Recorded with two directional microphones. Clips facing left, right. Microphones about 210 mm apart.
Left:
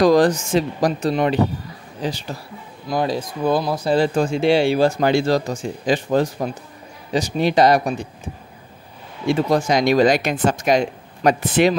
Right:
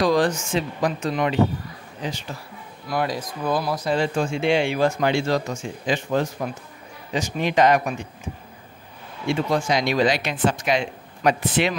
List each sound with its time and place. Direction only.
0.0 s speech: 40° left (ahead or behind)
9.3 s speech: 40° left (ahead or behind)